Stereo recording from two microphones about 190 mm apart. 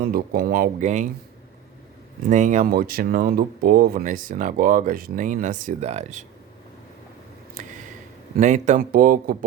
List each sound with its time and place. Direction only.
0.0 s speech: 50° right (ahead or behind)
2.3 s speech: 40° right (ahead or behind)
8.4 s speech: 40° right (ahead or behind)